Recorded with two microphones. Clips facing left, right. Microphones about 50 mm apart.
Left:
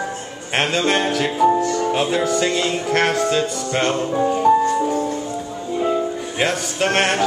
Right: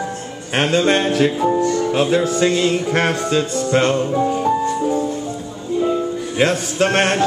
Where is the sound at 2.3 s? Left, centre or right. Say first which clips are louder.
Right 3 dB; centre.